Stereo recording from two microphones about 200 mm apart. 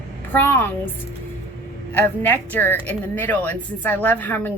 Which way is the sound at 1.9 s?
10° left (ahead or behind).